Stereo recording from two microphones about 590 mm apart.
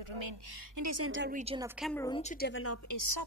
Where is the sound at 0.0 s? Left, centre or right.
Right.